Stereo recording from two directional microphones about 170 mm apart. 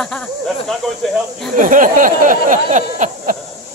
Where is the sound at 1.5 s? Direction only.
50° right (ahead or behind).